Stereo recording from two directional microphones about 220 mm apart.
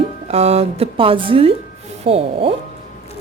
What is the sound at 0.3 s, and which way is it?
A woman's voice, 30° right (ahead or behind).